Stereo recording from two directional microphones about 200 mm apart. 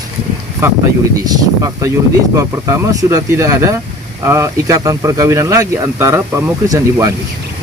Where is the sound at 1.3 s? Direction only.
20° right (ahead or behind).